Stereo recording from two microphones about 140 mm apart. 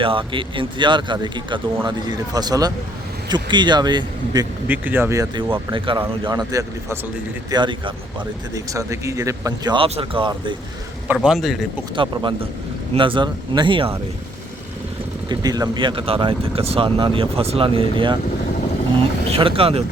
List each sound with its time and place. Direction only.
0.0 s speech: 40° right (ahead or behind)
4.7 s speech: 15° right (ahead or behind)
5.7 s speech: 35° right (ahead or behind)
6.2 s speech: 25° right (ahead or behind)
8.5 s speech: 20° right (ahead or behind)
9.7 s speech: 40° right (ahead or behind)
11.1 s a man's voice: 5° right (ahead or behind)
13.0 s speech: 35° right (ahead or behind)
15.3 s speech: 25° right (ahead or behind)
19.3 s speech: 40° right (ahead or behind)